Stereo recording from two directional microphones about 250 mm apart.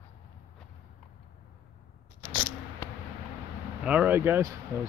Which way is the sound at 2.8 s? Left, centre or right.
Centre.